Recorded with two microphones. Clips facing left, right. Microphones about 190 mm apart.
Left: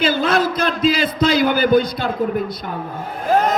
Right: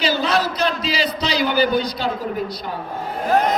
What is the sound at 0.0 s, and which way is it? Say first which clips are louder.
A man's voice: left 3 dB; 50° left (ahead or behind).